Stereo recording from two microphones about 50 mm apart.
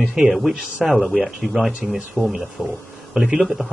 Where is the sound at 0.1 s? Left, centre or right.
Centre.